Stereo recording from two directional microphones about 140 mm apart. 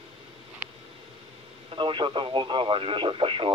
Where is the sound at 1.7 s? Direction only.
35° right (ahead or behind).